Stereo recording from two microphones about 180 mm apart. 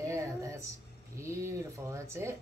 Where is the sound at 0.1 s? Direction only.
15° right (ahead or behind).